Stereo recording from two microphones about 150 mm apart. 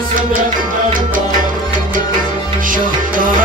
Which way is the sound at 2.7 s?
65° right (ahead or behind).